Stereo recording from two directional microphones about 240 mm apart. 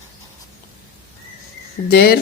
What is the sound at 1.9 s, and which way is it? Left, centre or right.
Speech, left.